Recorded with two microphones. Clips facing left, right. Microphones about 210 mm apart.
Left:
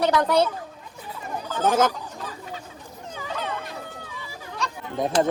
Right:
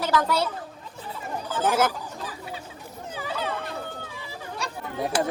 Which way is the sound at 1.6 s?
10° right (ahead or behind).